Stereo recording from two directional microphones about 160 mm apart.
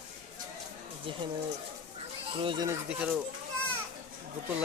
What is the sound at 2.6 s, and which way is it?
Speech, 10° right (ahead or behind).